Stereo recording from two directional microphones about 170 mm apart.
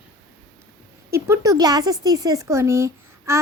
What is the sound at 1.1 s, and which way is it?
A woman's voice, 15° right (ahead or behind).